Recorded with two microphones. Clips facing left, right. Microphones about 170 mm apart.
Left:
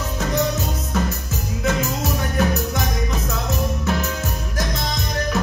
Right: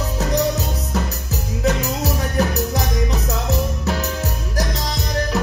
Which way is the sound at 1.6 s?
35° right (ahead or behind).